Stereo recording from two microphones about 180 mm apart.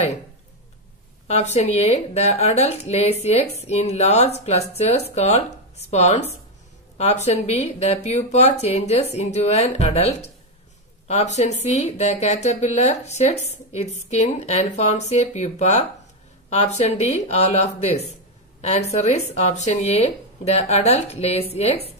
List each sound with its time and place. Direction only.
1.2 s speech: 40° left (ahead or behind)
7.2 s speech: 35° left (ahead or behind)